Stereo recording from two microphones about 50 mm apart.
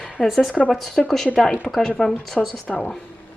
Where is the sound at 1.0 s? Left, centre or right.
Centre.